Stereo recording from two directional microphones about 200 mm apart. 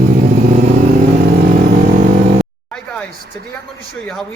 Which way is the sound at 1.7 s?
45° right (ahead or behind).